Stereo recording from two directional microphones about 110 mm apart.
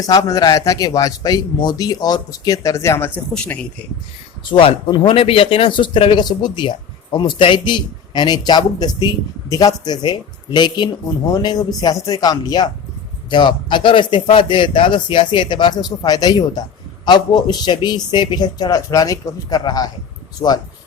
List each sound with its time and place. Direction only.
0.0 s a man's voice: 35° left (ahead or behind)
3.3 s a man's voice: 10° left (ahead or behind)
4.5 s a man's voice: 50° left (ahead or behind)